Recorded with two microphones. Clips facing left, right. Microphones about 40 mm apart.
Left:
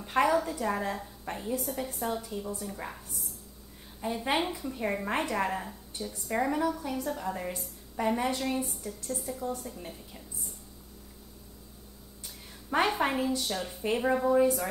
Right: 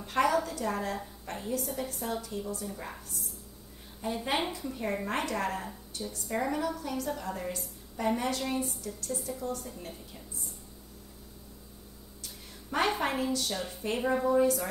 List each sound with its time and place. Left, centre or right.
0.0 s a woman's voice: centre
1.6 s a woman's voice: centre
4.0 s a woman's voice: centre
9.4 s a woman's voice: centre
9.7 s a woman's voice: centre
12.6 s a woman's voice: centre